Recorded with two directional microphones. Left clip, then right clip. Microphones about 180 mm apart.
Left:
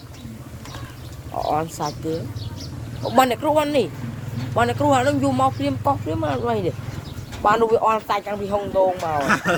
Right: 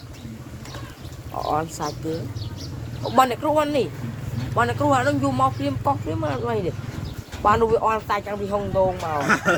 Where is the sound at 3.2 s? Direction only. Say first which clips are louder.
Left 1 dB; 40° left (ahead or behind).